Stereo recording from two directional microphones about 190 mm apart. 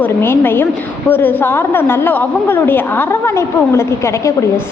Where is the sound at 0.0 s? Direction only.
10° left (ahead or behind).